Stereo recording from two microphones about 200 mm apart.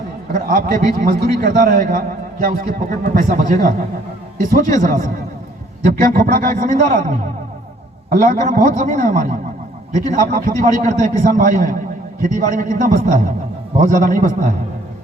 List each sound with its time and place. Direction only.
0.3 s a man's voice: 45° right (ahead or behind)